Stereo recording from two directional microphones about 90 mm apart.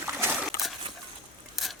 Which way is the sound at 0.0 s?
25° right (ahead or behind).